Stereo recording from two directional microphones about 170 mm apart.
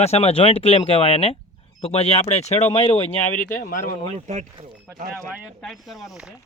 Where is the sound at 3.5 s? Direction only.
55° left (ahead or behind).